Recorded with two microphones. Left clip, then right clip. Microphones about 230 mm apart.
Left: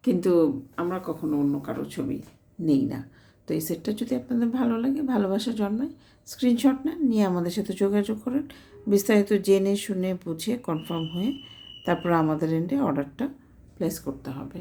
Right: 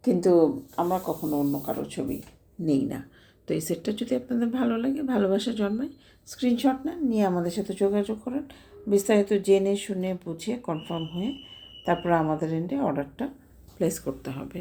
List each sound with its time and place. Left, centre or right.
0.0 s speech: left
1.4 s speech: centre
13.7 s speech: centre